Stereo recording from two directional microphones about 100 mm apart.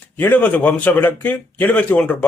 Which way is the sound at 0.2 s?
15° left (ahead or behind).